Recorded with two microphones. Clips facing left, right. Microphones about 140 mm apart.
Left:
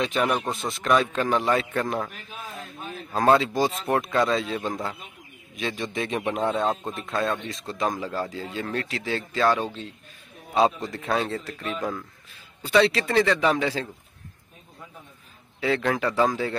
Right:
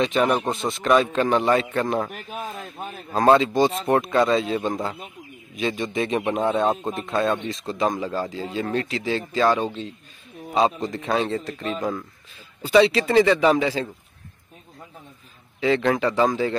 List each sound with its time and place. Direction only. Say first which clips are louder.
0.0 s a man's voice: right 4 dB; centre (ahead or behind)
2.0 s speech: right 7 dB; 50° right (ahead or behind)
3.2 s a man's voice: right 3 dB; centre (ahead or behind)
15.6 s a man's voice: right 4 dB; centre (ahead or behind)